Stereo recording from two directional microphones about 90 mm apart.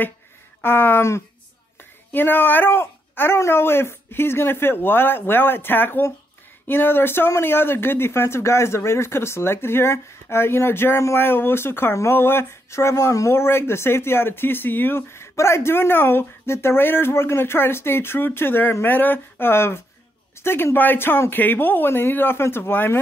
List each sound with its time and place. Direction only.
0.6 s speech: 25° left (ahead or behind)